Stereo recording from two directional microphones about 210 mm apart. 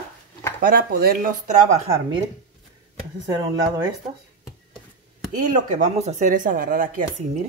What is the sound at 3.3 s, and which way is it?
Speech, 15° right (ahead or behind).